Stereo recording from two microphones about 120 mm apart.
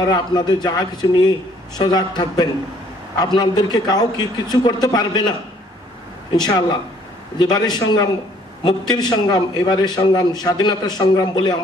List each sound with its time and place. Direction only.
0.0 s a man's voice: 35° left (ahead or behind)
6.3 s a man's voice: 35° left (ahead or behind)